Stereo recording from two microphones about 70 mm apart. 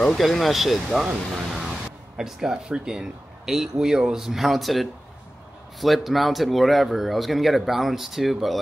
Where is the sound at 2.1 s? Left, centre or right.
Centre.